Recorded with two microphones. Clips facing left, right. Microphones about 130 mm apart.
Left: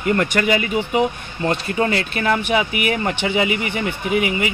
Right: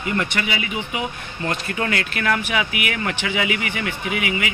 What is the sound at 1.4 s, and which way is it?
Speech, 30° left (ahead or behind).